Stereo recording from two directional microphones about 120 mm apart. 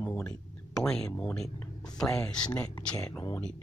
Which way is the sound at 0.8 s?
5° left (ahead or behind).